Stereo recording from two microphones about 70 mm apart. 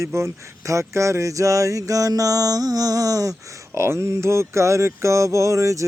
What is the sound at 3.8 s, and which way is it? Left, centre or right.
Mantra, right.